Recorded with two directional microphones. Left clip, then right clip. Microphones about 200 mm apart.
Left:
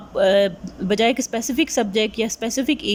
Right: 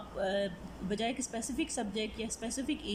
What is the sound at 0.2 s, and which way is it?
A woman's voice, 50° left (ahead or behind).